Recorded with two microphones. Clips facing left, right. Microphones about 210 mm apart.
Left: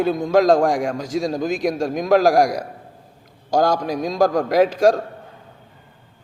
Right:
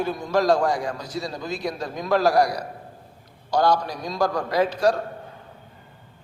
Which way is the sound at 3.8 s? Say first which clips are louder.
Left 7 dB; 90° left.